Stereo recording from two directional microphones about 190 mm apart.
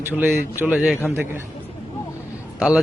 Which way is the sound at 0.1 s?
10° right (ahead or behind).